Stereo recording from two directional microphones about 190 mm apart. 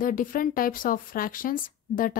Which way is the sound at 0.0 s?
45° left (ahead or behind).